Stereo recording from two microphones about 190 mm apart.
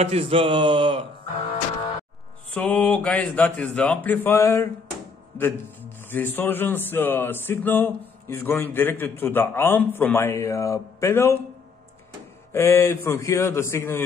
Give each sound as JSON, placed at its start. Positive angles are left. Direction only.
{"t": 0.0, "sound": "speech", "side_deg": -30}
{"t": 2.5, "sound": "a man's voice", "side_deg": 5}
{"t": 12.5, "sound": "a man's voice", "side_deg": 15}